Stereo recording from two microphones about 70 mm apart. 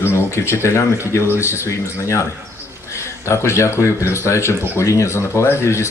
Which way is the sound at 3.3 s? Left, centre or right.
Left.